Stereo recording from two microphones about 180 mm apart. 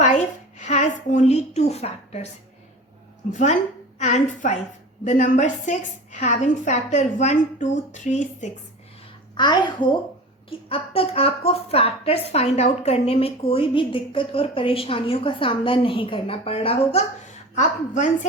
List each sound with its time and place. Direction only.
0.6 s dishes: 40° left (ahead or behind)
1.1 s a woman's voice: 40° left (ahead or behind)
3.3 s a woman's voice: 40° left (ahead or behind)
9.3 s a child's voice: 25° left (ahead or behind); by 18.3 s 45° left (ahead or behind)